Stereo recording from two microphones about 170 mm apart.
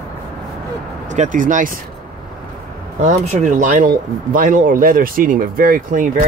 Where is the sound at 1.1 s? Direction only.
50° right (ahead or behind).